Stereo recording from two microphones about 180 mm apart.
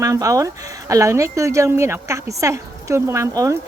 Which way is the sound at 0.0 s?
15° right (ahead or behind).